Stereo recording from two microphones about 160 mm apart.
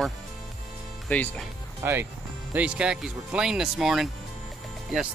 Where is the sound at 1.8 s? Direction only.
15° right (ahead or behind).